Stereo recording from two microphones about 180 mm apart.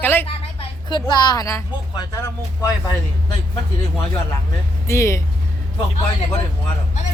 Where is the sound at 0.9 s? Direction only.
25° left (ahead or behind).